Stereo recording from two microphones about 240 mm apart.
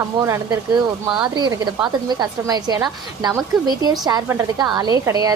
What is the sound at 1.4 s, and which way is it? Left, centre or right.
A woman's voice, centre.